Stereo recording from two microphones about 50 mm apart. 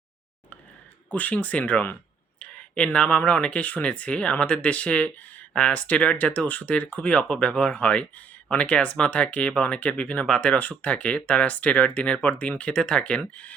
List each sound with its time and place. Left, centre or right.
1.1 s speech: left
10.6 s speech: left